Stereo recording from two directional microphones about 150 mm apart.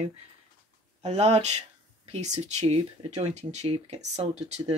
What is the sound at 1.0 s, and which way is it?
Speech, 45° right (ahead or behind).